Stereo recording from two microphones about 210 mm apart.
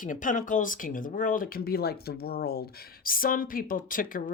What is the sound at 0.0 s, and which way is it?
Speech, 40° left (ahead or behind).